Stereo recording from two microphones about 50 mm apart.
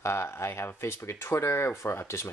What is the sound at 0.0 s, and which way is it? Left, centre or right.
Speech, left.